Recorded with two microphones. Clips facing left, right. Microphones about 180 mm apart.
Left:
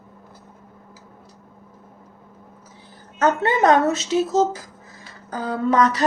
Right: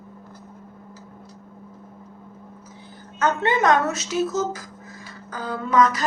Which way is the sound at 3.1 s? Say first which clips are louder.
Left 2 dB; 35° left (ahead or behind).